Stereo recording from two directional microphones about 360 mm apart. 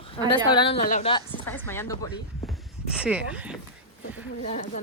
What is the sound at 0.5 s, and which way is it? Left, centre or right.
A woman's voice, centre.